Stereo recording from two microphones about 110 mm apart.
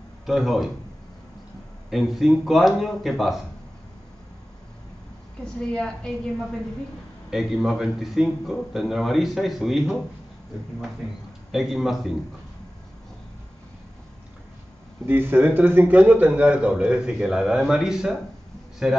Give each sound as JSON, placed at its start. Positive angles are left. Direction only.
{"t": 0.3, "sound": "a man's voice", "side_deg": 0}
{"t": 1.9, "sound": "a man's voice", "side_deg": 0}
{"t": 5.4, "sound": "a woman's voice", "side_deg": 5}
{"t": 11.5, "sound": "a man's voice", "side_deg": 0}
{"t": 15.0, "sound": "a man's voice", "side_deg": -20}